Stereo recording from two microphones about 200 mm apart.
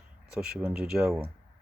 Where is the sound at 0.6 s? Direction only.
5° right (ahead or behind).